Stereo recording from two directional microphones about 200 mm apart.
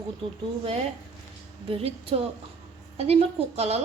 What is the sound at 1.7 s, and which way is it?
A woman's voice, 30° right (ahead or behind).